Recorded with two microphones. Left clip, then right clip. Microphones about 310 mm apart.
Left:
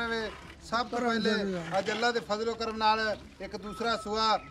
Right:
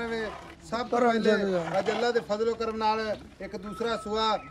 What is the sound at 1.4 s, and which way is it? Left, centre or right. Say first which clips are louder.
Speech: right 4 dB; centre.